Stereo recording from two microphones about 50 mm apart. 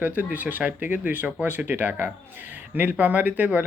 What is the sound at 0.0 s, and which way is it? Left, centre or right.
Speech, right.